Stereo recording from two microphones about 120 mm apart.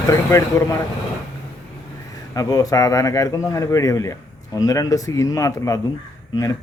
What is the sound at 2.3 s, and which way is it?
Speech, 30° left (ahead or behind).